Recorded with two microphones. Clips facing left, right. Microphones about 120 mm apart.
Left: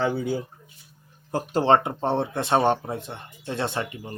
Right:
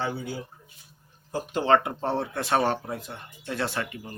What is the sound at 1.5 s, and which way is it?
Speech, 30° left (ahead or behind).